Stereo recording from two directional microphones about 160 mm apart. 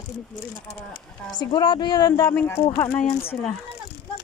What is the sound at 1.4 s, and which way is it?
Speech, 25° left (ahead or behind).